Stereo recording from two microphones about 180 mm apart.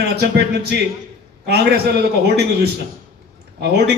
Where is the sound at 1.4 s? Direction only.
65° right (ahead or behind).